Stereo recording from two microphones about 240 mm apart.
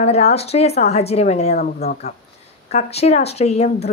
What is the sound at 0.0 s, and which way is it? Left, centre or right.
Speech, left.